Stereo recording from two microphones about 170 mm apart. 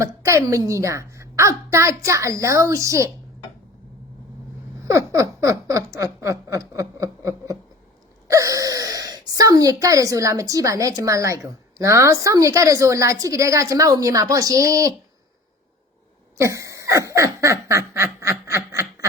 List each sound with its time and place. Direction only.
0.0 s a woman's voice: 15° right (ahead or behind)
4.9 s a sound: 20° right (ahead or behind)
8.3 s gasp: 20° right (ahead or behind)
9.8 s a woman's voice: 20° right (ahead or behind)
16.4 s snicker: 20° right (ahead or behind)